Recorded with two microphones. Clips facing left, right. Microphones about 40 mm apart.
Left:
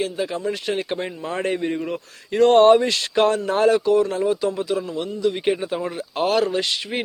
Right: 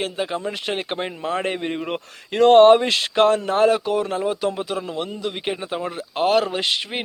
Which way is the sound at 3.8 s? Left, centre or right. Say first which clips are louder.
Left 4 dB; right.